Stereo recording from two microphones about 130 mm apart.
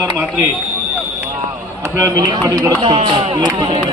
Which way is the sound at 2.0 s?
25° right (ahead or behind).